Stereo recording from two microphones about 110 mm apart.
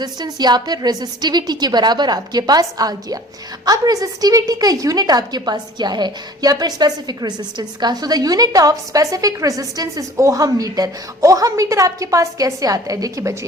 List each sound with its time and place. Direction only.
0.0 s a woman's voice: 40° right (ahead or behind)